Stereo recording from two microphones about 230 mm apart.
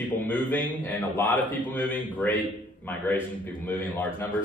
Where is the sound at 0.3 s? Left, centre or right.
Centre.